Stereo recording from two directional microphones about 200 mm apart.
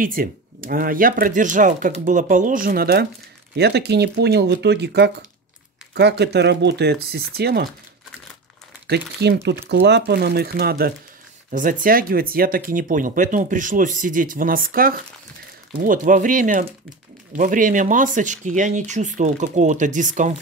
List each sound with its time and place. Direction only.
0.0 s speech: 45° right (ahead or behind)
8.8 s speech: 55° right (ahead or behind); by 20.3 s 40° right (ahead or behind)